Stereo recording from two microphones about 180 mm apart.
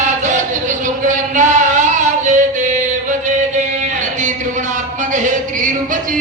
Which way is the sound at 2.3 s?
45° right (ahead or behind).